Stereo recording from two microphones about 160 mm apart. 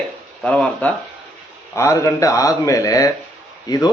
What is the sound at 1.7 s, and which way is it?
Speech, 20° left (ahead or behind).